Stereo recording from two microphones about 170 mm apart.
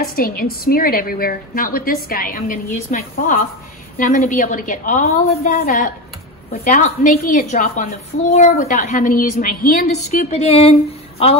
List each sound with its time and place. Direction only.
0.0 s a woman's voice: 60° left (ahead or behind)
10.3 s speech: 40° left (ahead or behind)